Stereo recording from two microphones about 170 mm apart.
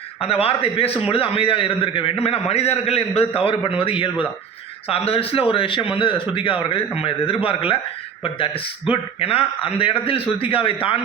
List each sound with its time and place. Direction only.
0.2 s a man's voice: 35° left (ahead or behind)
8.9 s a man's voice: 35° left (ahead or behind)